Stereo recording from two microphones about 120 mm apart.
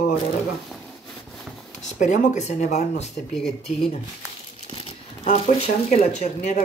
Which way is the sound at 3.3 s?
5° left (ahead or behind).